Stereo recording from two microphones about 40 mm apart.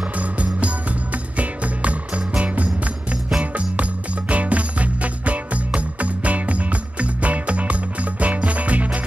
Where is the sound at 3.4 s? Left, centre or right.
Right.